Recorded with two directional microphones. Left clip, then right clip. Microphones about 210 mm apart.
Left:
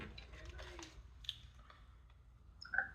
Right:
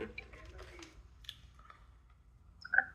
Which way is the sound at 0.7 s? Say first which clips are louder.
Even; 5° left (ahead or behind).